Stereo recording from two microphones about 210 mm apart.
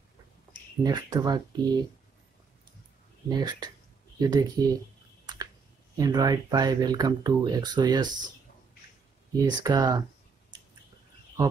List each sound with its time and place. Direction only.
0.8 s speech: 20° right (ahead or behind)
3.3 s speech: 20° right (ahead or behind)
5.2 s a sound: 20° right (ahead or behind)
5.9 s speech: 20° right (ahead or behind)
9.4 s speech: 20° right (ahead or behind)